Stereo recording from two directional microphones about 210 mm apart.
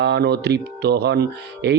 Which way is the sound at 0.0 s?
50° right (ahead or behind).